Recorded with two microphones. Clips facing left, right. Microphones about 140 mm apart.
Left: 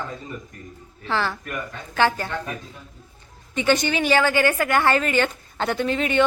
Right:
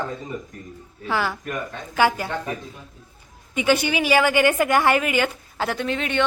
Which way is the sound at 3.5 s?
10° right (ahead or behind).